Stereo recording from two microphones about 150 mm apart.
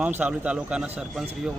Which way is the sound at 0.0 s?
10° right (ahead or behind).